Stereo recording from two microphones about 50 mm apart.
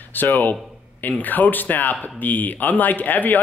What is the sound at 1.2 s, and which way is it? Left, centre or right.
Speech, left.